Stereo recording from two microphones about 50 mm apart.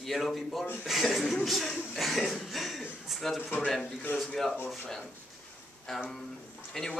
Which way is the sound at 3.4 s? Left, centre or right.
Left.